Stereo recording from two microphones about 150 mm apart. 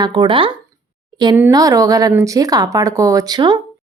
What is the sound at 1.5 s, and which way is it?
A woman's voice, 25° right (ahead or behind).